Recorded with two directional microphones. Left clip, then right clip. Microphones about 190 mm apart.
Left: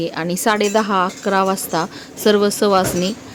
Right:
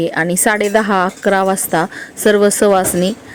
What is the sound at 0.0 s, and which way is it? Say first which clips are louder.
Speech: right 5 dB; 20° right (ahead or behind).